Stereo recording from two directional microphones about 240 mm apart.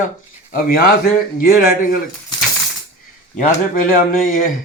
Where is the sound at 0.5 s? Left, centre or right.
Left.